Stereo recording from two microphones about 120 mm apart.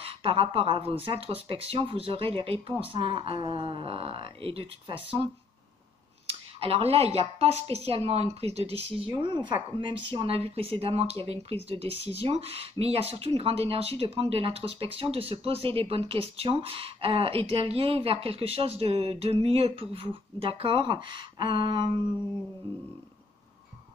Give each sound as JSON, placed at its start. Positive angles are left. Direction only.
{"t": 0.0, "sound": "speech", "side_deg": -50}
{"t": 9.1, "sound": "speech", "side_deg": -40}